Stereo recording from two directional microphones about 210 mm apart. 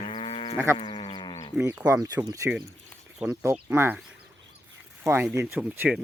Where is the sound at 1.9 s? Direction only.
15° right (ahead or behind).